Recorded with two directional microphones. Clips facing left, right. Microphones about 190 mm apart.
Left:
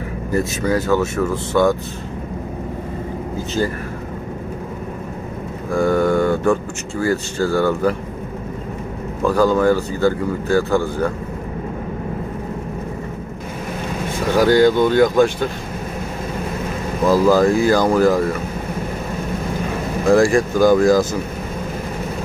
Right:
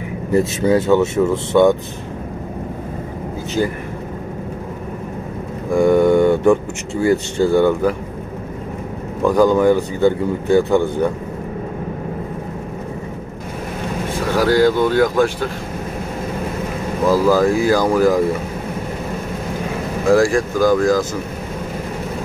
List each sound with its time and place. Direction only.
0.3 s speech: 25° right (ahead or behind)
5.7 s speech: 20° right (ahead or behind)
9.2 s speech: 15° right (ahead or behind)
14.3 s speech: 5° right (ahead or behind)
17.1 s speech: 10° right (ahead or behind)
20.1 s speech: centre (ahead or behind)
20.5 s speech: 25° left (ahead or behind)